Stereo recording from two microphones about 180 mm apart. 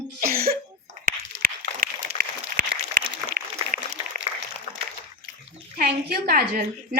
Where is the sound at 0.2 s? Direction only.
55° right (ahead or behind).